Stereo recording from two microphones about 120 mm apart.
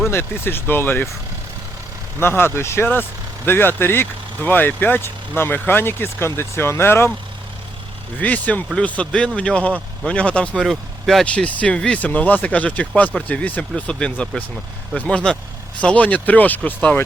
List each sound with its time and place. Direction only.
0.1 s speech: 20° left (ahead or behind)
2.1 s speech: 20° left (ahead or behind)
8.2 s speech: 10° left (ahead or behind)